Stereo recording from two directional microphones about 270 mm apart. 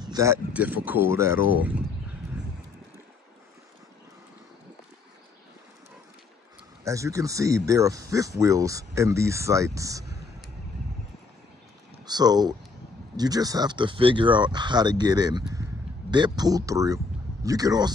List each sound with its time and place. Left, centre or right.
0.0 s speech: centre
6.8 s speech: centre
12.0 s speech: centre